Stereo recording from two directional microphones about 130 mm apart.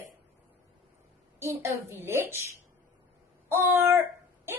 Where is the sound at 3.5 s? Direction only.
20° right (ahead or behind).